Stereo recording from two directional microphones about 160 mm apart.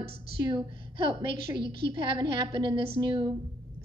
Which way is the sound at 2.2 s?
30° right (ahead or behind).